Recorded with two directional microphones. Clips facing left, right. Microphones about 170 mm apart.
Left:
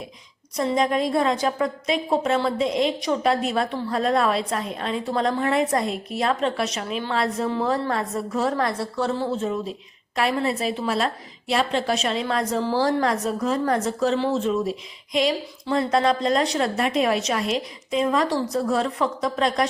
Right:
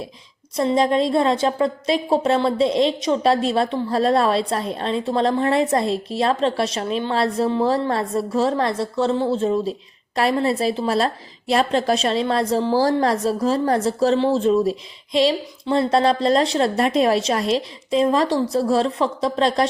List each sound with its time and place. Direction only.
0.5 s a woman's voice: 30° right (ahead or behind)